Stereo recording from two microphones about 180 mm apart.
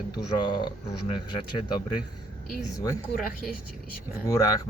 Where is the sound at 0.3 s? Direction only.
25° left (ahead or behind).